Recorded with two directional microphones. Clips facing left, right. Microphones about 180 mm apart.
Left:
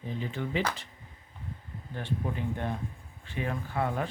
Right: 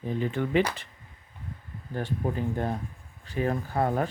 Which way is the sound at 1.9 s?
40° right (ahead or behind).